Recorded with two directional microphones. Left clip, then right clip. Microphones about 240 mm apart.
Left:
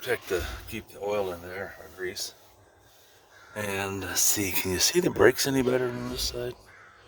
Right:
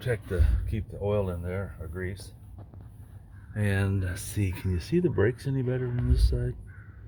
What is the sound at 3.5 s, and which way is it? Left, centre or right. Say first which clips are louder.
Speech: left 1 dB; left.